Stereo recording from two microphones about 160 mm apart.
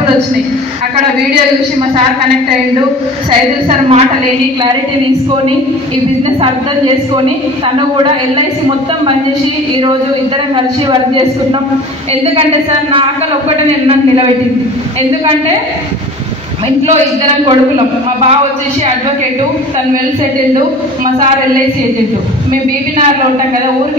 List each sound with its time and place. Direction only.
3.3 s a woman's voice: 35° right (ahead or behind)
10.5 s a woman's voice: 30° right (ahead or behind)